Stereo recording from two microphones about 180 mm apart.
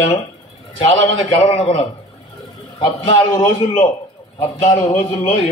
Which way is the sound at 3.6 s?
35° left (ahead or behind).